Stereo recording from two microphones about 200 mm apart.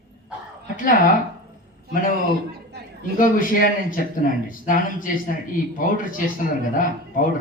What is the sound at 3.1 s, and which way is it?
A man's voice, 45° left (ahead or behind).